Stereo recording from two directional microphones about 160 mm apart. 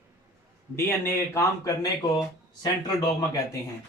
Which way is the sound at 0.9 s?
15° left (ahead or behind).